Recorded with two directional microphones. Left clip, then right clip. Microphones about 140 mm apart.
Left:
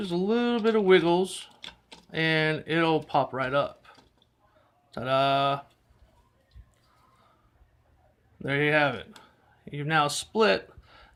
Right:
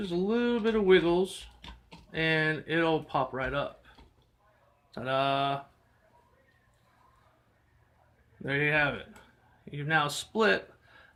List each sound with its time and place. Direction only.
0.0 s speech: 45° left (ahead or behind)
8.4 s speech: 40° left (ahead or behind)